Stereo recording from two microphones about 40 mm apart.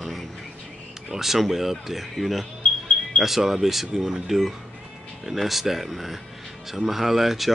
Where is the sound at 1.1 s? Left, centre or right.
Centre.